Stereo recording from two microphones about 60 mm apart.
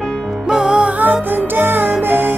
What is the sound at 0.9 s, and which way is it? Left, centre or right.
Music, right.